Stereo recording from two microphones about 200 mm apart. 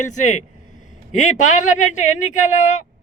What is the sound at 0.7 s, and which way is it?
Speech, 40° left (ahead or behind).